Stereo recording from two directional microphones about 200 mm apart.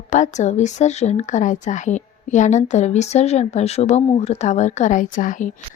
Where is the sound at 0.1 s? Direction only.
35° left (ahead or behind).